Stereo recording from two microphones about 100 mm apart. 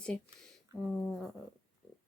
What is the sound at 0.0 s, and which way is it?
Speech, 10° left (ahead or behind).